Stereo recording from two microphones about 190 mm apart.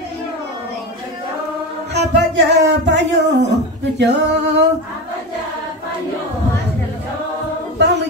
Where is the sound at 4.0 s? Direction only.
65° right (ahead or behind).